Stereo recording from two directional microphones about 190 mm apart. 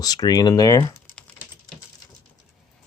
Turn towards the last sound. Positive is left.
turn(degrees=20)  # may be behind; listen again after turning